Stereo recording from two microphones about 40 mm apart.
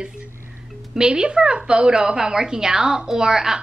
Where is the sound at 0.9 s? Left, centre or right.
Right.